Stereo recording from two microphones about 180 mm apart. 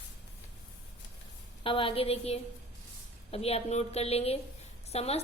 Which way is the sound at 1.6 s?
30° left (ahead or behind).